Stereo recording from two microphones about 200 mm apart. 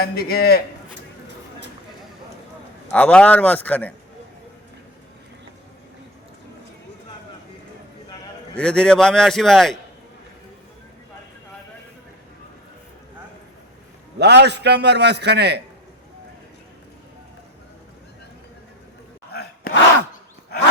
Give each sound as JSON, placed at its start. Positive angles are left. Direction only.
{"t": 0.0, "sound": "a man's voice", "side_deg": 50}
{"t": 2.9, "sound": "speech", "side_deg": 5}
{"t": 8.5, "sound": "a man's voice", "side_deg": 5}
{"t": 14.2, "sound": "a man's voice", "side_deg": -55}
{"t": 19.3, "sound": "a sound", "side_deg": 50}